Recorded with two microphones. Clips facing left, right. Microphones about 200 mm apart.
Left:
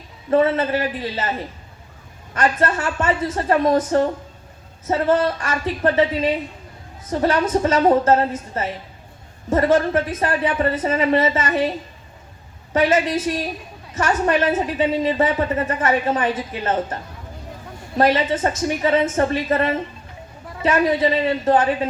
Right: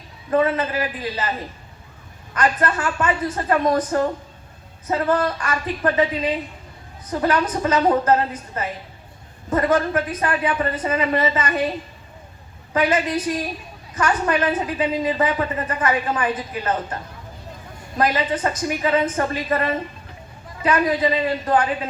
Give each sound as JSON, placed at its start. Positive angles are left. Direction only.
{"t": 0.3, "sound": "a woman's voice", "side_deg": 25}
{"t": 2.3, "sound": "a woman's voice", "side_deg": 25}
{"t": 7.1, "sound": "a woman's voice", "side_deg": 25}
{"t": 12.7, "sound": "a woman's voice", "side_deg": 25}